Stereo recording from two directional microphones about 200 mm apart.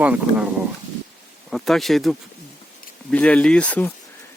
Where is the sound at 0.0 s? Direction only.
5° right (ahead or behind).